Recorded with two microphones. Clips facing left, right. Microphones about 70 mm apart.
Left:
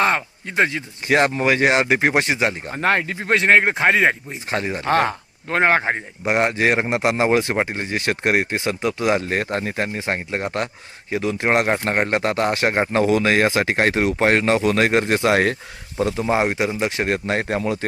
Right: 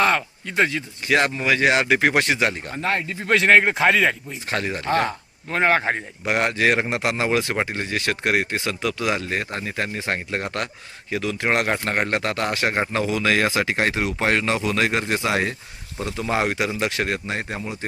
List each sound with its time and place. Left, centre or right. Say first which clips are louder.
0.0 s speech: even; left
2.8 s speech: left 5 dB; left
3.3 s a man's voice: even; centre
3.9 s speech: left 2 dB; left
4.5 s a man's voice: left 2 dB; centre
4.9 s speech: left 4 dB; left
5.8 s speech: left 2 dB; centre
7.5 s speech: left 2 dB; centre; by 9.8 s left
9.8 s speech: left 2 dB; left
16.1 s speech: left 1 dB; left
17.2 s speech: left 6 dB; left